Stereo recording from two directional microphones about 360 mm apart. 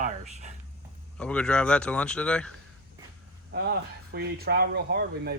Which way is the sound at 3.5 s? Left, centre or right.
Right.